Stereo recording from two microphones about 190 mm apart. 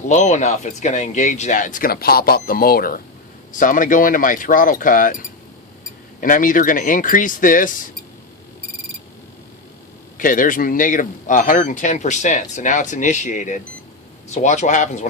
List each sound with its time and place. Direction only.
0.1 s speech: 40° left (ahead or behind)
6.1 s speech: 45° left (ahead or behind)
10.2 s speech: 45° left (ahead or behind)